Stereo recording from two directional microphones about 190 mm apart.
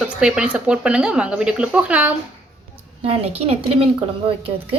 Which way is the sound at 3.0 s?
30° right (ahead or behind).